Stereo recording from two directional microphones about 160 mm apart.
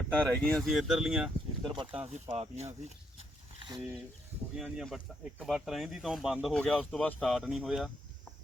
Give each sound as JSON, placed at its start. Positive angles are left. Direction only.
{"t": 0.1, "sound": "speech", "side_deg": 5}
{"t": 1.6, "sound": "speech", "side_deg": -30}
{"t": 2.0, "sound": "speech", "side_deg": -45}
{"t": 3.8, "sound": "speech", "side_deg": -5}